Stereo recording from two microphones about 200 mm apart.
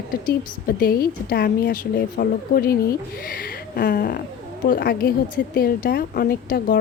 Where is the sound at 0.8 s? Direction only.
50° left (ahead or behind).